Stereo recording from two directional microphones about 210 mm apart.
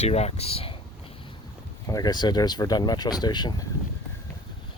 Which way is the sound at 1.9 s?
20° left (ahead or behind).